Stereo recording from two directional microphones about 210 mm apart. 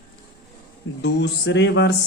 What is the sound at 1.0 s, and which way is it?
Speech, 55° left (ahead or behind).